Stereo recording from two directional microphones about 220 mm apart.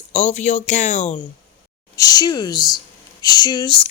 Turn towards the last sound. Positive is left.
turn(degrees=20)  # may be behind; listen again after turning